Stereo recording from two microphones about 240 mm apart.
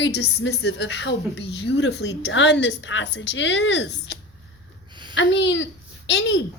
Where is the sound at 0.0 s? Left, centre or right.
Left.